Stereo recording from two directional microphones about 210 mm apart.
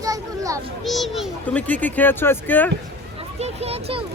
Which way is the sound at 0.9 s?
Centre (ahead or behind).